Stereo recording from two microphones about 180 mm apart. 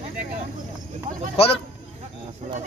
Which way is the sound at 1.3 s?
35° left (ahead or behind).